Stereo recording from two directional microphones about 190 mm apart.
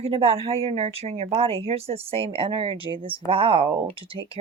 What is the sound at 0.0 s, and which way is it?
A woman's voice, 30° right (ahead or behind).